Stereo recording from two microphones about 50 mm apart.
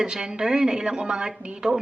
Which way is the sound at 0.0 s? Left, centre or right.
Centre.